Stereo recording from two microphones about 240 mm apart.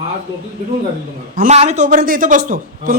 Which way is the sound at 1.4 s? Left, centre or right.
Right.